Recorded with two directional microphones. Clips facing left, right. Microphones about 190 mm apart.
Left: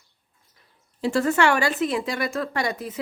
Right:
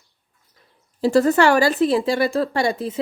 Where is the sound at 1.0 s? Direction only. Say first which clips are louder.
Right 5 dB; 35° right (ahead or behind).